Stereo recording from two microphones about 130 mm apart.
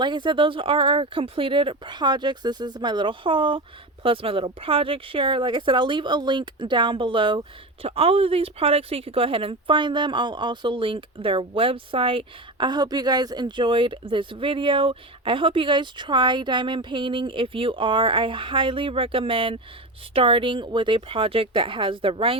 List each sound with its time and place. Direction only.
0.0 s speech: 35° right (ahead or behind)